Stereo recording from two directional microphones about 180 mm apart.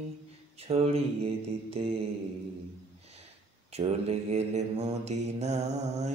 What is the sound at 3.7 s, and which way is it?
Mantra, 35° right (ahead or behind).